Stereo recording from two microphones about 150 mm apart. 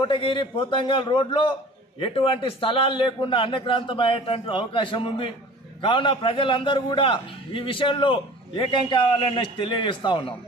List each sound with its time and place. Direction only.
0.0 s a man's voice: 35° left (ahead or behind)